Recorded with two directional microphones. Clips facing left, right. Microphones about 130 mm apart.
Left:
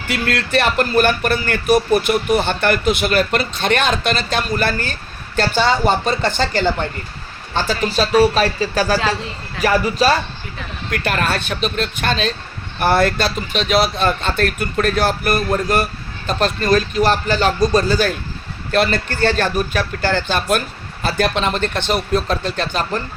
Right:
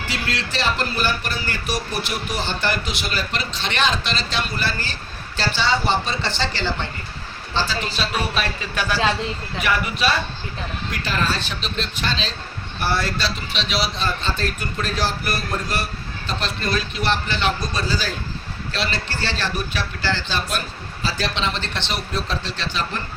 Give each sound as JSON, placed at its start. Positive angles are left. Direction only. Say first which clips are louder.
{"t": 0.1, "sound": "a man's voice", "louder": "left 10 dB", "side_deg": 55}
{"t": 10.9, "sound": "a man's voice", "louder": "left 5 dB", "side_deg": 60}